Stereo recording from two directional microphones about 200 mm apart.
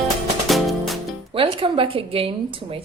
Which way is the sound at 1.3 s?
25° right (ahead or behind).